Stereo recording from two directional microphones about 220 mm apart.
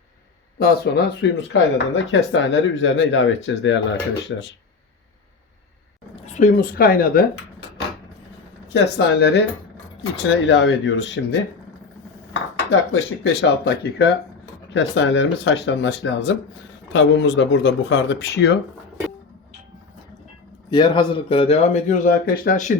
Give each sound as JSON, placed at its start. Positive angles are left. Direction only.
{"t": 0.6, "sound": "speech", "side_deg": 45}
{"t": 6.2, "sound": "speech", "side_deg": 35}
{"t": 8.7, "sound": "speech", "side_deg": 50}
{"t": 12.7, "sound": "speech", "side_deg": 55}
{"t": 20.7, "sound": "a man's voice", "side_deg": 20}